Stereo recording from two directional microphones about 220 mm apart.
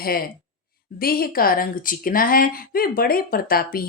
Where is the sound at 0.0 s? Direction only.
40° left (ahead or behind).